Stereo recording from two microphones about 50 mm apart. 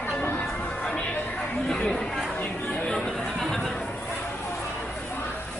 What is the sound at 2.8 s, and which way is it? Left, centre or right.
Chatter, centre.